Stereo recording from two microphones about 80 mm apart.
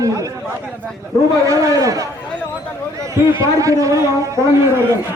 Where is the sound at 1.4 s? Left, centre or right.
Right.